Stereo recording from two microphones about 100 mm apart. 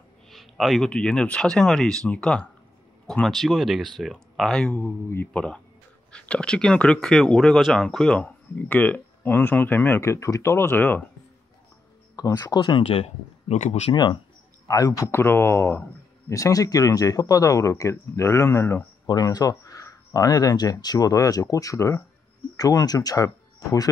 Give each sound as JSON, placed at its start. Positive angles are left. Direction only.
{"t": 0.3, "sound": "speech", "side_deg": 0}
{"t": 4.7, "sound": "speech", "side_deg": 25}
{"t": 5.3, "sound": "speech", "side_deg": 10}
{"t": 12.2, "sound": "speech", "side_deg": 40}
{"t": 12.8, "sound": "speech", "side_deg": 85}
{"t": 14.7, "sound": "speech", "side_deg": 35}
{"t": 19.0, "sound": "speech", "side_deg": 40}